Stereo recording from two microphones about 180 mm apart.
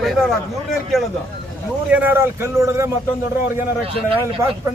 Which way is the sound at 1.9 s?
10° right (ahead or behind).